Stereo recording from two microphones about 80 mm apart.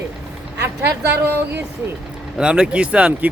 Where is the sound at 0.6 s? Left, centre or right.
Right.